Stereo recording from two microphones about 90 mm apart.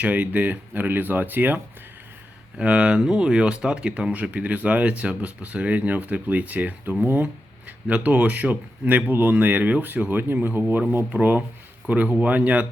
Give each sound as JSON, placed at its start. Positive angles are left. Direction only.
{"t": 0.0, "sound": "speech", "side_deg": -15}